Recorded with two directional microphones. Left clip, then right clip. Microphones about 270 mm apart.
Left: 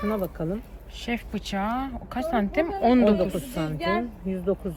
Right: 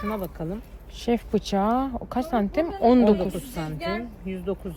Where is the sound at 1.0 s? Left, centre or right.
Centre.